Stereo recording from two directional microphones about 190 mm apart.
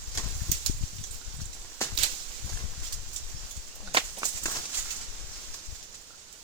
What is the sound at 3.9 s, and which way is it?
Walk, 30° right (ahead or behind).